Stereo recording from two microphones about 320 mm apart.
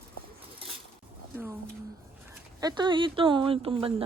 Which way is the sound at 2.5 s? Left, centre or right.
Centre.